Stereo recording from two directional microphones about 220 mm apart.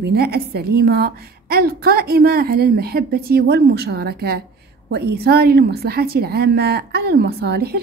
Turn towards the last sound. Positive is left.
turn(degrees=-45)  # may be behind; listen again after turning